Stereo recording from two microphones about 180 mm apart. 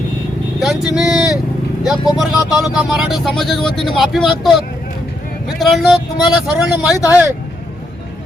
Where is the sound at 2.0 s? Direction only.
25° left (ahead or behind).